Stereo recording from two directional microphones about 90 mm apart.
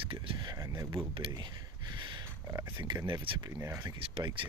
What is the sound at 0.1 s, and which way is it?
Speech, 90° right.